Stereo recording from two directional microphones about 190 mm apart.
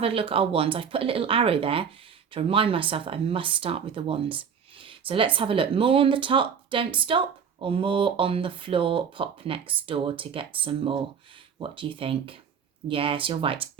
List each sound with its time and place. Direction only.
0.0 s speech: 30° right (ahead or behind)